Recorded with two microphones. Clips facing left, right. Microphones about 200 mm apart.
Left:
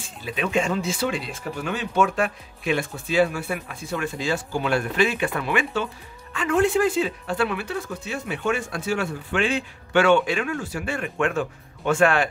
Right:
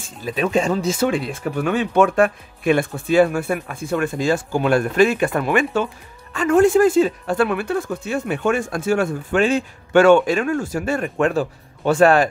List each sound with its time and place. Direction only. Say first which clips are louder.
0.2 s speech: right 5 dB; 40° right (ahead or behind)